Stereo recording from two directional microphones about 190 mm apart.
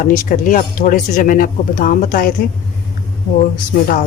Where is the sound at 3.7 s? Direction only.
50° left (ahead or behind).